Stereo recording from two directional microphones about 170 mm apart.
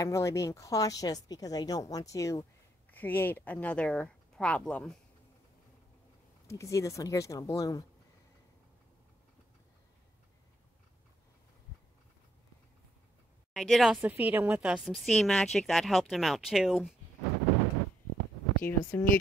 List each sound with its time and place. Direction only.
0.0 s speech: 20° left (ahead or behind)
6.4 s speech: 20° left (ahead or behind)
13.5 s a woman's voice: centre (ahead or behind)
18.7 s speech: 15° left (ahead or behind)